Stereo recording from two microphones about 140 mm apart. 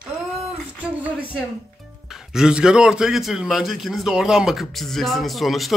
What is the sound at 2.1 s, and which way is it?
A man's voice, 5° right (ahead or behind).